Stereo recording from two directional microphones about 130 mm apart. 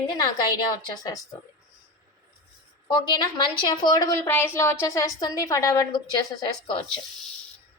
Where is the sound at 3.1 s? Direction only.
35° left (ahead or behind).